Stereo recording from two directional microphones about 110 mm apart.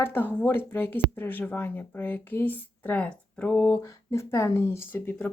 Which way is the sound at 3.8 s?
25° left (ahead or behind).